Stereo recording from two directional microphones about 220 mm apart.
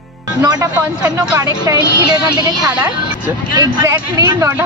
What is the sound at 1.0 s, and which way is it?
Speech, 5° right (ahead or behind).